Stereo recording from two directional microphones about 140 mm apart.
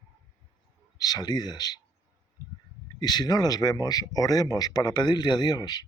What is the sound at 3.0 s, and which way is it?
A man's voice, 30° left (ahead or behind).